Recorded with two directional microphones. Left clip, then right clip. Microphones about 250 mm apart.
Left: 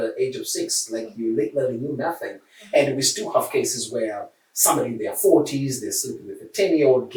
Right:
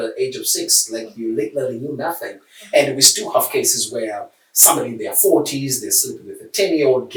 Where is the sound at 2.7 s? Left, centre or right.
Centre.